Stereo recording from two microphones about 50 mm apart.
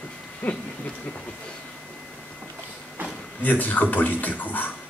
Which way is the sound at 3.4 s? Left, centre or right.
Left.